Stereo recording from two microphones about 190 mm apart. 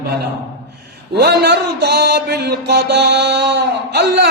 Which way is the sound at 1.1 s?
60° right (ahead or behind).